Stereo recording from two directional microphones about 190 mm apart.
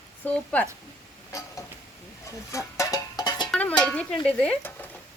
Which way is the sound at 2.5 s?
15° left (ahead or behind).